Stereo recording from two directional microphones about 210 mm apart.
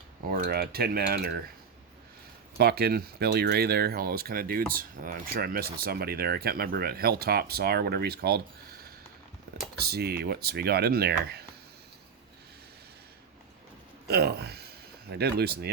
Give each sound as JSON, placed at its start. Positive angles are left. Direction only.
{"t": 0.3, "sound": "speech", "side_deg": -45}
{"t": 2.6, "sound": "speech", "side_deg": -50}
{"t": 9.8, "sound": "speech", "side_deg": -50}
{"t": 14.1, "sound": "speech", "side_deg": -50}